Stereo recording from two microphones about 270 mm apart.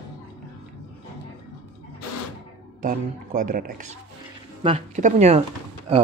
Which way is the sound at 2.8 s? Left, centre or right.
Right.